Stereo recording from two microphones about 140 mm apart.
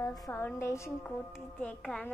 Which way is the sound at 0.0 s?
25° left (ahead or behind).